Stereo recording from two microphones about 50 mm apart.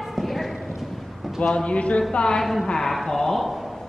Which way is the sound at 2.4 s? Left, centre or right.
Centre.